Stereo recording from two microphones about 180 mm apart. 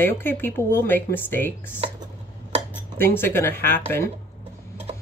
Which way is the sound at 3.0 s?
10° left (ahead or behind).